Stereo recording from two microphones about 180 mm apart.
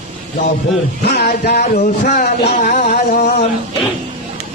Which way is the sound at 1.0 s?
60° left (ahead or behind).